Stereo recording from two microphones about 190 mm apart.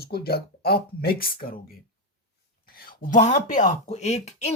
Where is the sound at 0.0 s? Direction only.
55° left (ahead or behind).